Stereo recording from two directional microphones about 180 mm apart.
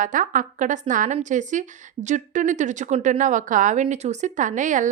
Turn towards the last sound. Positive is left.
turn(degrees=-45)  # may be behind; listen again after turning